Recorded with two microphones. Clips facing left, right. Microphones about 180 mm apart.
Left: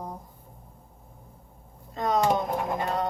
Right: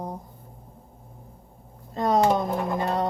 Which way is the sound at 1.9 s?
35° right (ahead or behind).